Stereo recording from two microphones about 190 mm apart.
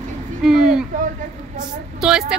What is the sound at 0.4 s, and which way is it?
Speech, 5° right (ahead or behind).